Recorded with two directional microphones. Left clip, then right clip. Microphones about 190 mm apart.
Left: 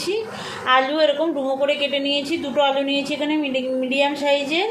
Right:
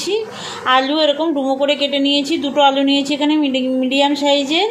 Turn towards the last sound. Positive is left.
turn(degrees=-45)  # may be behind; listen again after turning